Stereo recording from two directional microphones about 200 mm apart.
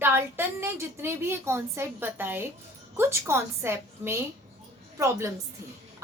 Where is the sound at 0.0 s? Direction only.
10° right (ahead or behind).